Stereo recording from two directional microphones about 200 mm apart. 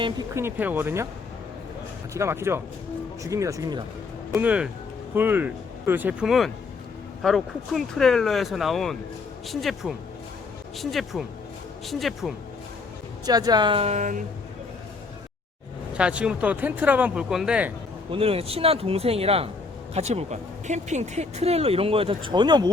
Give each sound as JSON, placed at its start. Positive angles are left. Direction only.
{"t": 0.0, "sound": "speech", "side_deg": -15}
{"t": 2.1, "sound": "speech", "side_deg": -15}
{"t": 4.3, "sound": "speech", "side_deg": -5}
{"t": 13.2, "sound": "speech", "side_deg": -20}
{"t": 16.0, "sound": "speech", "side_deg": -5}
{"t": 18.1, "sound": "speech", "side_deg": -30}